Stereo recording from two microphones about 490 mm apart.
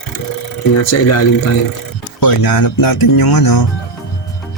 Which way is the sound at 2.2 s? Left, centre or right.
Left.